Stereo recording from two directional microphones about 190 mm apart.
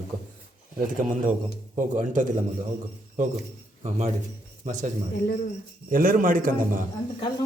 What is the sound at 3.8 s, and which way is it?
Speech, 35° right (ahead or behind).